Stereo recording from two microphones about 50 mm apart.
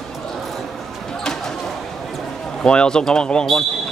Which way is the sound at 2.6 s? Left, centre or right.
Centre.